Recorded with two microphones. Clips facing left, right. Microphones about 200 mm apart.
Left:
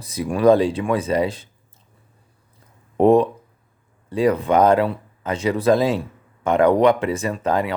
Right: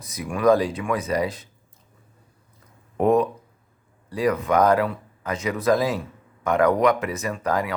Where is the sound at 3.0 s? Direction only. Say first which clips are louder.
Left 5 dB; 30° left (ahead or behind).